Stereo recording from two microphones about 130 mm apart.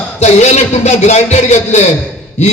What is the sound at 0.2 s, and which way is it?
A man's voice, 60° left (ahead or behind).